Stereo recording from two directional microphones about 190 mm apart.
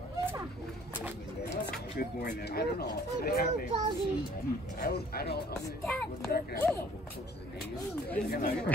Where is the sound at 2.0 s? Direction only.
55° left (ahead or behind).